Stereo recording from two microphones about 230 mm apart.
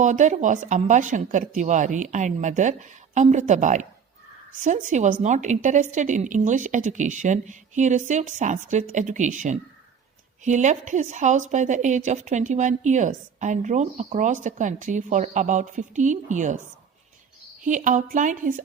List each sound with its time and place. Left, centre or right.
0.0 s a woman's voice: right
17.6 s a woman's voice: right